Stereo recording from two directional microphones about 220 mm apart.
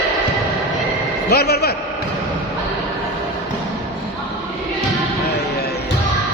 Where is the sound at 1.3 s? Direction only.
45° left (ahead or behind).